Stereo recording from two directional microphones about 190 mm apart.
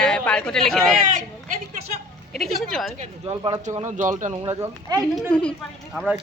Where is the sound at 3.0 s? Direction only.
30° right (ahead or behind).